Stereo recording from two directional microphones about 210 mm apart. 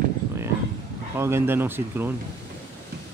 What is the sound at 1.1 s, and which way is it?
Speech, 10° right (ahead or behind).